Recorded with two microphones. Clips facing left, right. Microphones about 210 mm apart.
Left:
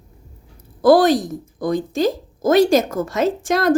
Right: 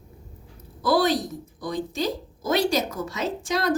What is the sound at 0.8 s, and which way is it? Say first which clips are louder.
A woman's voice: left 9 dB; 50° left (ahead or behind).